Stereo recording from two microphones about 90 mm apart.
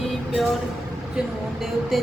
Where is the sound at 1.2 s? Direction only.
10° right (ahead or behind).